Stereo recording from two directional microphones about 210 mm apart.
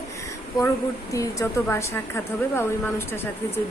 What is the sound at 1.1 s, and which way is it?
A woman's voice, 15° left (ahead or behind).